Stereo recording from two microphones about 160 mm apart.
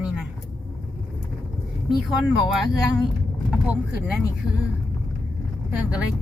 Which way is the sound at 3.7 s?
10° right (ahead or behind).